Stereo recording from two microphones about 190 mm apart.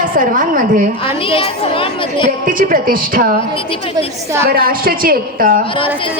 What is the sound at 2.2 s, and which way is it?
A woman's voice, 45° right (ahead or behind).